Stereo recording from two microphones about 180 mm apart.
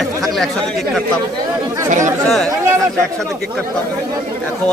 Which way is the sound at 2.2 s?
Centre (ahead or behind).